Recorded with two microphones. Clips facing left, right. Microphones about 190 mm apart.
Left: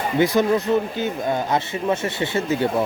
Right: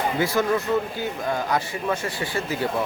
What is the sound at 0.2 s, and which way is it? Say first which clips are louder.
A man's voice: left 7 dB; 20° left (ahead or behind).